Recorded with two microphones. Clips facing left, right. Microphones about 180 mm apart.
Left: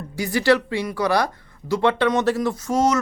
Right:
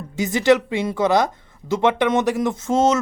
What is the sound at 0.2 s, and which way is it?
Speech, 20° right (ahead or behind).